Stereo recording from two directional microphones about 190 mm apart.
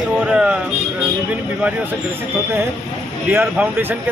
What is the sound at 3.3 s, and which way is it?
Speech, 10° right (ahead or behind).